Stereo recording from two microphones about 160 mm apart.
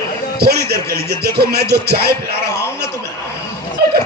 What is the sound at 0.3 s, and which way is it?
A man's voice, 80° right.